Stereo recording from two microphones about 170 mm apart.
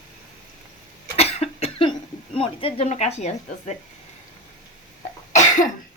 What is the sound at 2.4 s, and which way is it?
A woman's voice, 35° left (ahead or behind).